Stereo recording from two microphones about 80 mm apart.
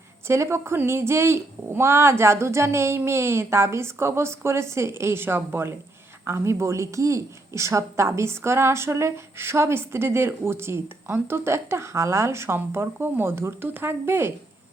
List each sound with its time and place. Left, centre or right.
0.3 s a woman's voice: right